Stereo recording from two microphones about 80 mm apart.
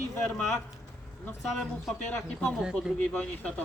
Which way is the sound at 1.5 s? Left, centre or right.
Centre.